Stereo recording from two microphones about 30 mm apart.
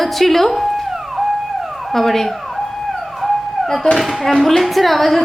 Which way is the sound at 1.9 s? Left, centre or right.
Centre.